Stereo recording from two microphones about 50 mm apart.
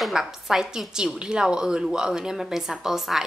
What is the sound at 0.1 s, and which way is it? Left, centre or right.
A woman's voice, centre.